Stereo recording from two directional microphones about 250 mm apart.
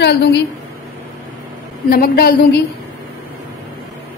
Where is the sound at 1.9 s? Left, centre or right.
Left.